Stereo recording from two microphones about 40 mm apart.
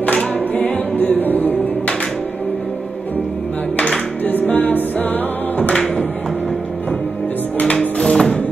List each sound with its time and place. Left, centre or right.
0.2 s music: left
4.2 s music: left
8.0 s music: left